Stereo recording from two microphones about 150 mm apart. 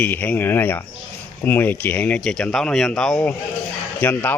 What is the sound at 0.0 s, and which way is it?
A man's voice, 10° left (ahead or behind).